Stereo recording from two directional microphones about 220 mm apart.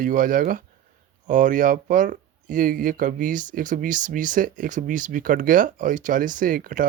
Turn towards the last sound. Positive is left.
turn(degrees=-40)  # may be behind; listen again after turning